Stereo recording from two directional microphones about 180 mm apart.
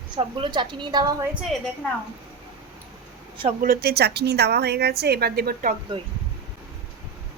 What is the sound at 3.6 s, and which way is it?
A woman's voice, 55° right (ahead or behind).